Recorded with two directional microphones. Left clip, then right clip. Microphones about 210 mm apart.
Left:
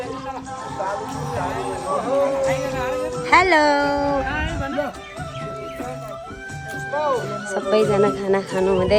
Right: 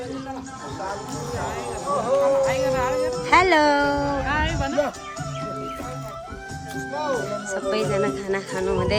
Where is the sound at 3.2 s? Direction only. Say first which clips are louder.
Left 2 dB; 15° right (ahead or behind).